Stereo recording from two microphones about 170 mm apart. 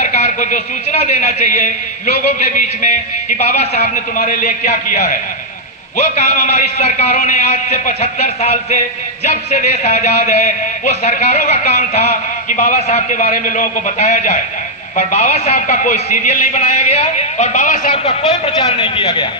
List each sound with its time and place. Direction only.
0.0 s a man's voice: 40° left (ahead or behind)